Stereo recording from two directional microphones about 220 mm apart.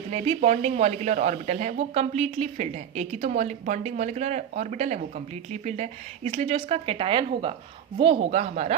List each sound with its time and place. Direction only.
0.1 s speech: 30° right (ahead or behind)